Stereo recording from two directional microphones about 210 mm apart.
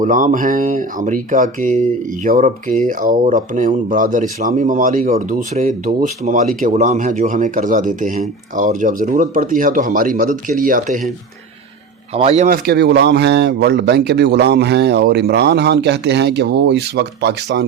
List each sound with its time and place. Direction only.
0.0 s speech: 40° right (ahead or behind)
12.1 s speech: 30° right (ahead or behind)
12.5 s speech: 50° right (ahead or behind)